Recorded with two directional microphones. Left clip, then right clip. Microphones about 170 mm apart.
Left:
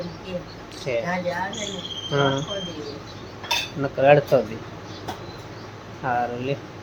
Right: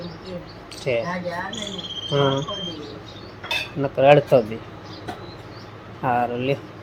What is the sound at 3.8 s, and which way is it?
Cricket, 15° right (ahead or behind).